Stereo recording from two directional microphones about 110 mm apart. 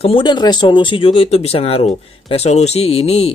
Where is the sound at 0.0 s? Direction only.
50° left (ahead or behind).